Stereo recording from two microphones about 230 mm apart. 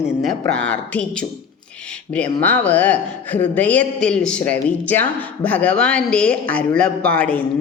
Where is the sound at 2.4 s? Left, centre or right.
Centre.